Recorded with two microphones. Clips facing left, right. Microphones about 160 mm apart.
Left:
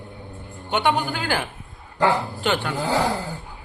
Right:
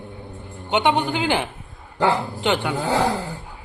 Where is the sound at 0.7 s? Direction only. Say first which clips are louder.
Right 2 dB; 20° right (ahead or behind).